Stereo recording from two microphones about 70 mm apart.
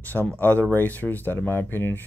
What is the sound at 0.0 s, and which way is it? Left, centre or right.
Speech, left.